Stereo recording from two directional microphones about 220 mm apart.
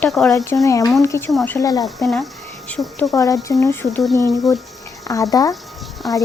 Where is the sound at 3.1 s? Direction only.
15° left (ahead or behind).